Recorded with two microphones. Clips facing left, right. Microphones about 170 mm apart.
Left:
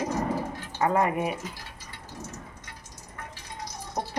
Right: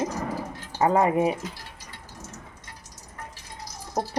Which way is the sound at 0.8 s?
25° right (ahead or behind).